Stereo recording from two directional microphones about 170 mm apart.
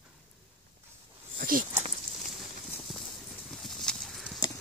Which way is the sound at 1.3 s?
55° right (ahead or behind).